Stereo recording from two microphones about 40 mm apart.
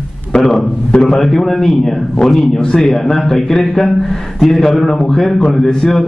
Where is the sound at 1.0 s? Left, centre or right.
Centre.